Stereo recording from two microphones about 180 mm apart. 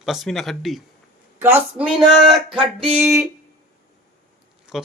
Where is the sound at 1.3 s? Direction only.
15° right (ahead or behind).